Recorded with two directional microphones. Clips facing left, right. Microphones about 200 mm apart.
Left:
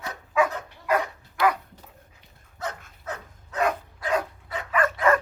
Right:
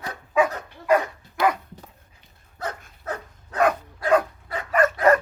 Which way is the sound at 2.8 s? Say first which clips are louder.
Right 4 dB; 55° right (ahead or behind).